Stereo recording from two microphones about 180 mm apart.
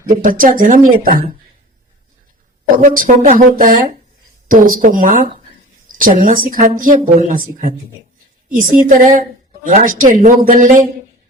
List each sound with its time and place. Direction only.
0.2 s speech: 50° right (ahead or behind)
2.8 s speech: 50° right (ahead or behind)